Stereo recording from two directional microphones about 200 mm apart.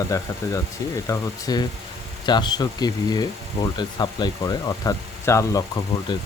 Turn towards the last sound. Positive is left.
turn(degrees=20)  # may be behind; listen again after turning